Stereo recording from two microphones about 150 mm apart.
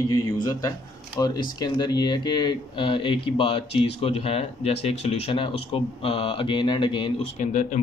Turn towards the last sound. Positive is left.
turn(degrees=55)  # may be behind; listen again after turning